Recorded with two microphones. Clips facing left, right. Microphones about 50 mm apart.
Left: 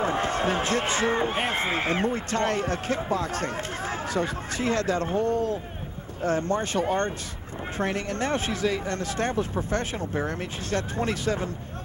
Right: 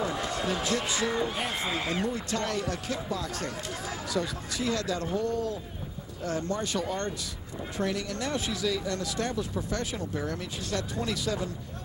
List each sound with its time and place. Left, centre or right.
0.0 s speech: left